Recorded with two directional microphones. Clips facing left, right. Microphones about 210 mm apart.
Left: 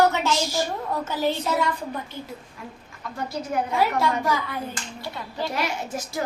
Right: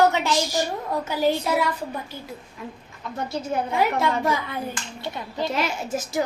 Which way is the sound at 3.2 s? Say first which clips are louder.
Even; 20° right (ahead or behind).